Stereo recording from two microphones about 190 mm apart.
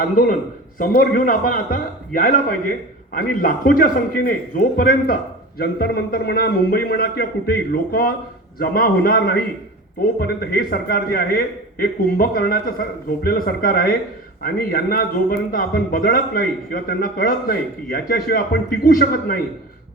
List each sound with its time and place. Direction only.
0.2 s a man's voice: 45° left (ahead or behind)